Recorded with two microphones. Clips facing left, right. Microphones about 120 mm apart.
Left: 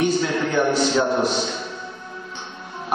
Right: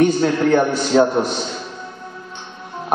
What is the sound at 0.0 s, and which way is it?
A man's voice, 50° right (ahead or behind).